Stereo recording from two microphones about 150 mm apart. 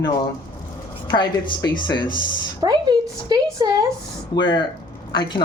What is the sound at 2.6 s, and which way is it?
Speech, 25° right (ahead or behind).